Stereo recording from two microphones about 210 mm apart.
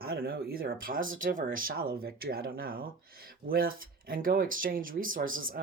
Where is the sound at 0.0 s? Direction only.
45° right (ahead or behind).